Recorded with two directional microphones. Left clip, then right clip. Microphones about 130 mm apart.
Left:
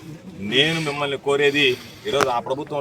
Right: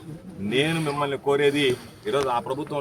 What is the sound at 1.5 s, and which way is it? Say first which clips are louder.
Speech: left 4 dB; 90° right.